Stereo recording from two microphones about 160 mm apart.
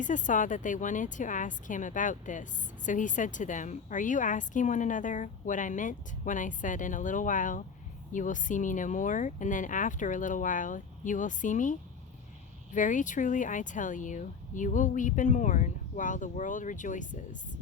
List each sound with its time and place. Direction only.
0.0 s speech: 50° left (ahead or behind)